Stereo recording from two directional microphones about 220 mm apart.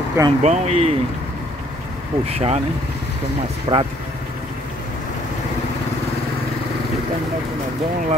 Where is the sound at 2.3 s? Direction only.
30° right (ahead or behind).